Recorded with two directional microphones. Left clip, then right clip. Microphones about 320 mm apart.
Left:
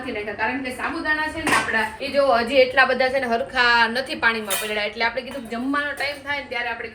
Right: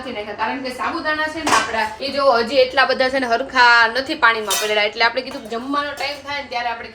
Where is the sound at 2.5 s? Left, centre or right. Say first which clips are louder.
Right 1 dB; right.